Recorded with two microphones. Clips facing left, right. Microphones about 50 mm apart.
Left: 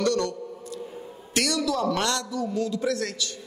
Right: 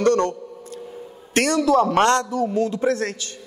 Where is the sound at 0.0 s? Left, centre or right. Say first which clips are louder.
Right 6 dB; right.